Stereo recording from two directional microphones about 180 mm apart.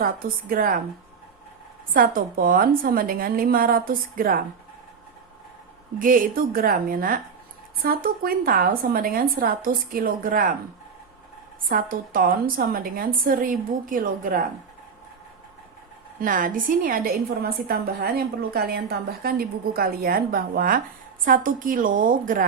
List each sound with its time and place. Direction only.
0.0 s a woman's voice: 50° right (ahead or behind)
1.9 s a woman's voice: 50° right (ahead or behind)
6.0 s a woman's voice: 50° right (ahead or behind)
11.7 s a woman's voice: 50° right (ahead or behind)
16.2 s a woman's voice: 50° right (ahead or behind)